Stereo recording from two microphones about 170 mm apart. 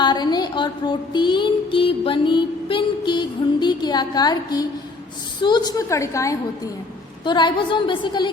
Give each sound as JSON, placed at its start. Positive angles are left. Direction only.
{"t": 0.0, "sound": "music", "side_deg": 25}
{"t": 5.4, "sound": "a woman's voice", "side_deg": 25}